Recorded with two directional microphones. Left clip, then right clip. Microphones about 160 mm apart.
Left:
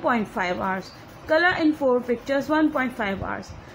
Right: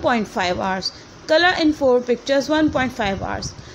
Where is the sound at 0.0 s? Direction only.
20° right (ahead or behind).